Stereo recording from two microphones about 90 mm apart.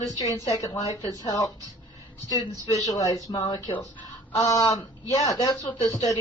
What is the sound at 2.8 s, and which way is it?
Speech, 45° left (ahead or behind).